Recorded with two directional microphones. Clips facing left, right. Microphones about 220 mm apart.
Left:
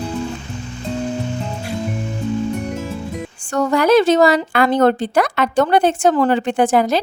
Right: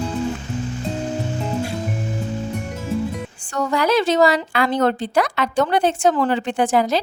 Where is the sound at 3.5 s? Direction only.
50° left (ahead or behind).